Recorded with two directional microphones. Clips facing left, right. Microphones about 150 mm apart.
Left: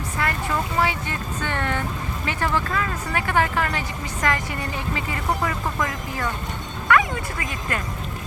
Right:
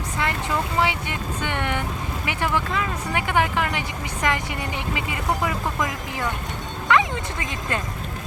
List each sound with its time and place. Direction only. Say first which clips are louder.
0.2 s speech: even; 20° right (ahead or behind)